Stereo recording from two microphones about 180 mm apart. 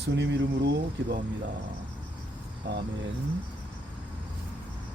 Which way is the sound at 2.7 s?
70° right (ahead or behind).